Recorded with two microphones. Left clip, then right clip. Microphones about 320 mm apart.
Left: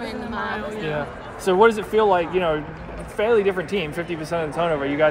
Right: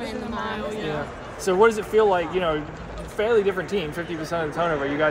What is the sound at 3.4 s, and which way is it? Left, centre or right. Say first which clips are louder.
Speech: left 2 dB; left.